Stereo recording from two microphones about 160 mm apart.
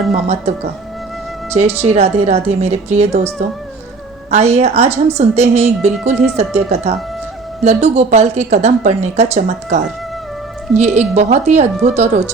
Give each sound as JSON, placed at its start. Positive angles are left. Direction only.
{"t": 0.1, "sound": "speech", "side_deg": -40}
{"t": 1.5, "sound": "speech", "side_deg": -40}
{"t": 4.3, "sound": "a woman's voice", "side_deg": -45}